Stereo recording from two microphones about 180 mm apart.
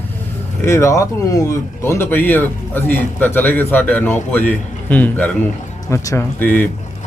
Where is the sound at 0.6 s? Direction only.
15° left (ahead or behind).